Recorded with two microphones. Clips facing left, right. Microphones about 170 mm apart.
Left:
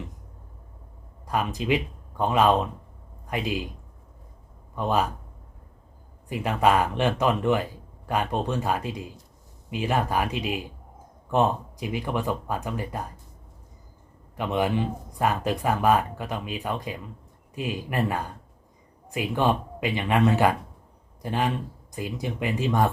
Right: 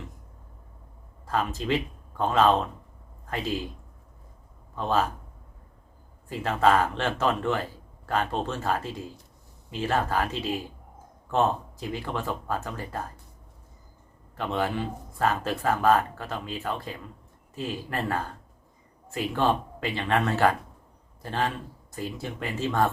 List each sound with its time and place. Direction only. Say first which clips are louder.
1.3 s speech: left 2 dB; 15° left (ahead or behind)
4.7 s a man's voice: left 1 dB; 15° left (ahead or behind)
6.2 s speech: even; 15° left (ahead or behind)
14.3 s a man's voice: left 3 dB; 15° left (ahead or behind)